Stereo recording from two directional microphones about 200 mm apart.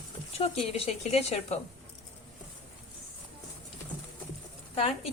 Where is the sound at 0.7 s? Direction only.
30° left (ahead or behind).